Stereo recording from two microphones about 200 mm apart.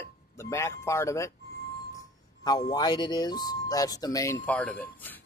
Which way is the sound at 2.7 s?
20° left (ahead or behind).